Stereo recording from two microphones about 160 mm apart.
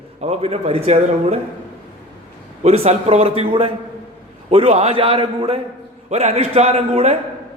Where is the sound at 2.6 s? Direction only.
40° right (ahead or behind).